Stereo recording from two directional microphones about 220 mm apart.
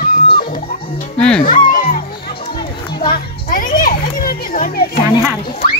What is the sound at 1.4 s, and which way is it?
Music, 35° left (ahead or behind).